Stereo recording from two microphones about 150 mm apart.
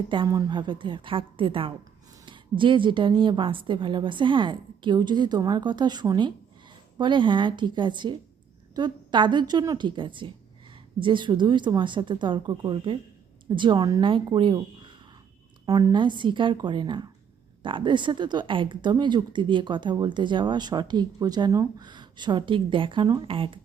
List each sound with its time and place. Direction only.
0.3 s speech: 25° right (ahead or behind)